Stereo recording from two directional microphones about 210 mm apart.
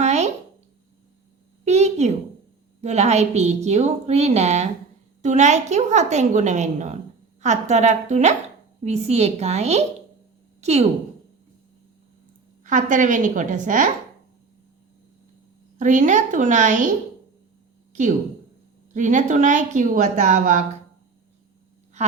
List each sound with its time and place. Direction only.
0.0 s a sound: 35° right (ahead or behind)
1.6 s a child's voice: 30° right (ahead or behind)
12.6 s a woman's voice: 35° right (ahead or behind)
15.8 s a woman's voice: 35° right (ahead or behind)
18.9 s a woman's voice: 35° right (ahead or behind)